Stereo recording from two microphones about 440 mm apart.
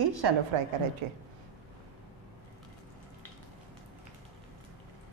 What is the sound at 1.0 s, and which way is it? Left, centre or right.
Speech, right.